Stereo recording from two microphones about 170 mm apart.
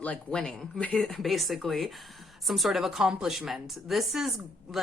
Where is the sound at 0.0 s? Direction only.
5° left (ahead or behind).